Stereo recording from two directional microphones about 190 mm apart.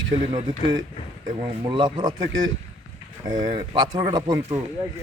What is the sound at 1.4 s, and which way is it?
Speech, 20° right (ahead or behind).